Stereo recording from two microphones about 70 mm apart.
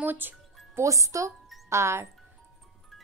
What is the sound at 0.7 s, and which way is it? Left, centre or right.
Speech, right.